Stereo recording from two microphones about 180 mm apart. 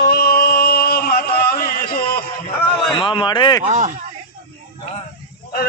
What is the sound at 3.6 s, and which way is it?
Speech, 40° right (ahead or behind).